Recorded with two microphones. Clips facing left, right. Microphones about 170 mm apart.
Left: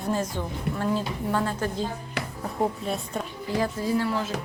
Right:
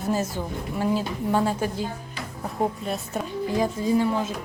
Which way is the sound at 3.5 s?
15° right (ahead or behind).